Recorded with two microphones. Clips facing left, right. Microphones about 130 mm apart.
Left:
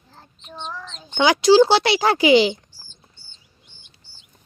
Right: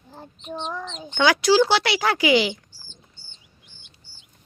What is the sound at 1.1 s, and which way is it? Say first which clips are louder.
Speech: left 4 dB; 20° left (ahead or behind).